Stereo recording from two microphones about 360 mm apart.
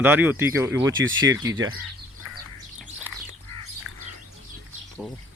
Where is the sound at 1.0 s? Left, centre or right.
Right.